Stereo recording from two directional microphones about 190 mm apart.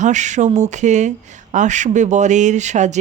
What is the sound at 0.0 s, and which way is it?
Speech, 40° right (ahead or behind).